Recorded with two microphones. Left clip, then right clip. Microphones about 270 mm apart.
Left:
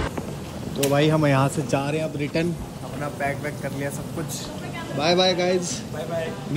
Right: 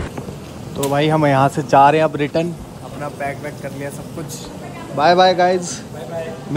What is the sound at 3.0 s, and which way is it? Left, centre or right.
Speech, centre.